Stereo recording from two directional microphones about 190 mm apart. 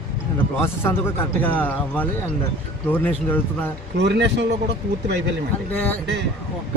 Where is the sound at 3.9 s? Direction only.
65° right (ahead or behind).